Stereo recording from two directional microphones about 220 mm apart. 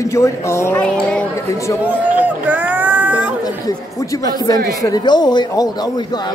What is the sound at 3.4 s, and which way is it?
Speech, 15° left (ahead or behind).